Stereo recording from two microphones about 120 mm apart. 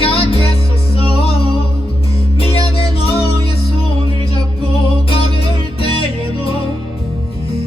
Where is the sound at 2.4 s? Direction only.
55° left (ahead or behind).